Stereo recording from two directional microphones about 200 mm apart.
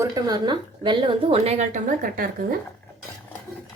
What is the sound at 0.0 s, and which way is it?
A woman's voice, 20° right (ahead or behind).